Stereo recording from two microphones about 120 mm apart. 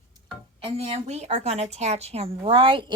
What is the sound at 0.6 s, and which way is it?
A woman's voice, 55° right (ahead or behind).